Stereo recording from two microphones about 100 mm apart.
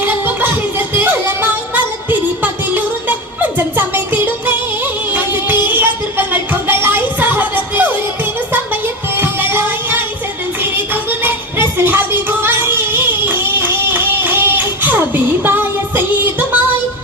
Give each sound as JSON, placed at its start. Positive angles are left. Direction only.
{"t": 0.0, "sound": "music", "side_deg": -20}
{"t": 11.2, "sound": "music", "side_deg": -20}